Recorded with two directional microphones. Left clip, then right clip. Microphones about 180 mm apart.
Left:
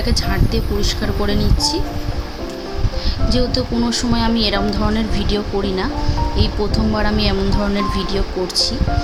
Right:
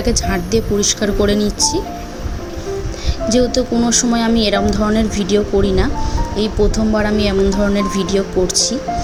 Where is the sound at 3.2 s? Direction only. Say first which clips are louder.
Right 5 dB; 20° right (ahead or behind).